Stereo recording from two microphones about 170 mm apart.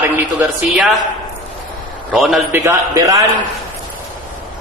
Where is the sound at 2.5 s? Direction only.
15° right (ahead or behind).